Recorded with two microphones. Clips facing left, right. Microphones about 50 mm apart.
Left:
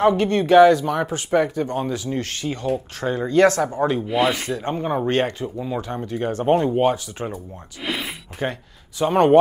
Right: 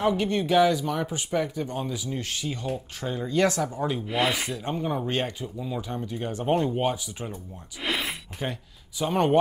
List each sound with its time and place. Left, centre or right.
0.0 s speech: left
4.1 s speech: centre
4.6 s speech: left
5.1 s speech: left
6.4 s speech: left
7.8 s a sound: centre
8.4 s speech: left